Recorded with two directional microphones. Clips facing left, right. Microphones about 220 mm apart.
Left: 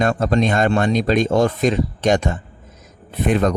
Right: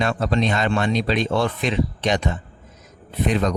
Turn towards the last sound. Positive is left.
turn(degrees=50)  # may be behind; listen again after turning